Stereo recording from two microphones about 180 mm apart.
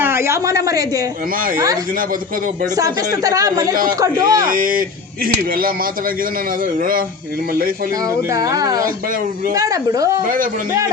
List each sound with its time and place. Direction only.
0.0 s a woman's voice: 15° right (ahead or behind)
2.7 s speech: 20° right (ahead or behind)
4.4 s speech: 50° right (ahead or behind)
8.3 s speech: 20° right (ahead or behind)